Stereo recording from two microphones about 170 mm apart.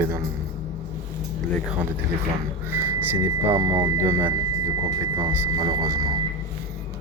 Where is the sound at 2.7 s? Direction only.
15° right (ahead or behind).